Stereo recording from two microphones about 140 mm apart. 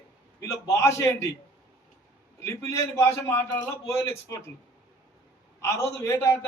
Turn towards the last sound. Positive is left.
turn(degrees=20)  # may be behind; listen again after turning